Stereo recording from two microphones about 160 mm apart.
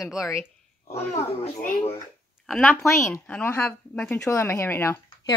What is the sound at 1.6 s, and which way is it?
Speech, 40° left (ahead or behind).